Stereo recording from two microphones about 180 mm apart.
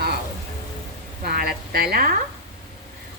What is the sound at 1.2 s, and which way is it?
Speech, 60° right (ahead or behind).